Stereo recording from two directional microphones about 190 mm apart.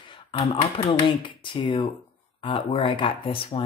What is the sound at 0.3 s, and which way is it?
Speech, 30° left (ahead or behind).